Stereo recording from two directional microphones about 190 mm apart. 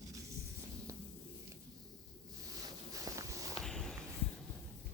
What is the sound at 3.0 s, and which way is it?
Walk, 15° right (ahead or behind).